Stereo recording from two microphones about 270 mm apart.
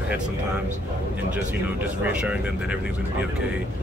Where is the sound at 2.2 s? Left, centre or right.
Centre.